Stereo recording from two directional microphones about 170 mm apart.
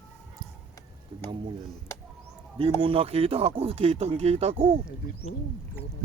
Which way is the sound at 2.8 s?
35° right (ahead or behind).